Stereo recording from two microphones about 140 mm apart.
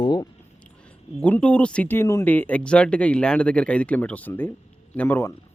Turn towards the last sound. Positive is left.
turn(degrees=15)  # may be behind; listen again after turning